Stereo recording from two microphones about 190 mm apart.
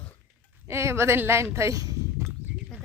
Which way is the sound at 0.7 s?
15° right (ahead or behind).